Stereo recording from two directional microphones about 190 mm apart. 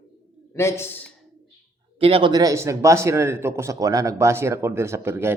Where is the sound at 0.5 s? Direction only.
15° left (ahead or behind).